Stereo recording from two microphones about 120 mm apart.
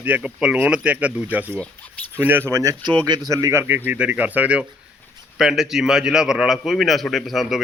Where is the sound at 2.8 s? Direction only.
40° right (ahead or behind).